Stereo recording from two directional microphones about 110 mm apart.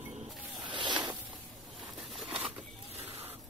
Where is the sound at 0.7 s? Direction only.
45° right (ahead or behind).